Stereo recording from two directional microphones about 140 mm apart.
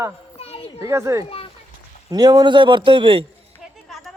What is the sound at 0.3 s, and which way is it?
Children playing, 45° left (ahead or behind).